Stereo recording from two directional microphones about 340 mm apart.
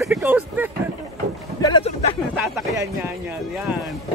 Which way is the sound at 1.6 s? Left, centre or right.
Centre.